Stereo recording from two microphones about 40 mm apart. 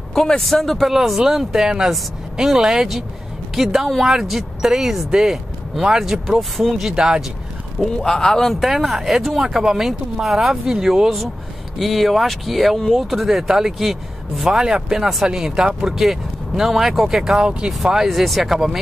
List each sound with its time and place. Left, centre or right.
0.1 s a sound: centre
0.4 s speech: centre
7.8 s speech: centre
8.5 s speech: centre
11.8 s speech: centre
16.0 s speech: centre
17.4 s speech: right
18.0 s speech: centre